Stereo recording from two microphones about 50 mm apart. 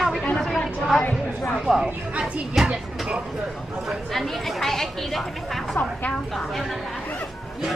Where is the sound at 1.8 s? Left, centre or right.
Right.